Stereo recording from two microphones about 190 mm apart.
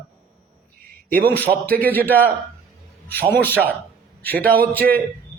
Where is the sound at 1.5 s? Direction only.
10° left (ahead or behind).